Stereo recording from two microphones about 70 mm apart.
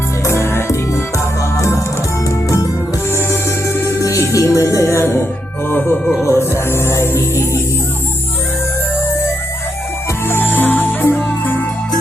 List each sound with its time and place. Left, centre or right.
0.3 s music: left
3.1 s music: left
4.9 s music: left
6.2 s music: left
10.2 s music: left